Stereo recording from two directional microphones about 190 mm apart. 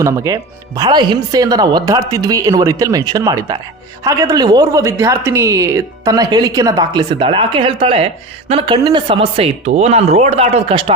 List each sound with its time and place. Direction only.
0.0 s speech: 15° right (ahead or behind)